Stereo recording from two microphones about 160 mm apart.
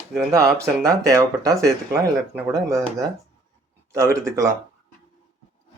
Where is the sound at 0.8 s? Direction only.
20° right (ahead or behind).